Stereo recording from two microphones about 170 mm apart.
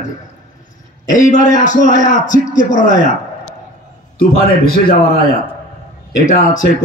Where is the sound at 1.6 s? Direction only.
45° left (ahead or behind).